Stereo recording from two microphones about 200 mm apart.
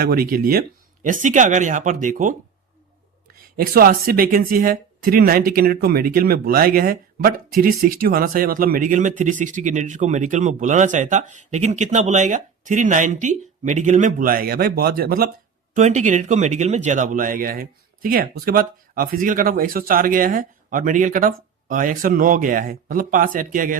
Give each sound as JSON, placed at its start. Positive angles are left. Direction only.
{"t": 0.0, "sound": "speech", "side_deg": -50}
{"t": 3.8, "sound": "speech", "side_deg": -45}
{"t": 15.7, "sound": "speech", "side_deg": -35}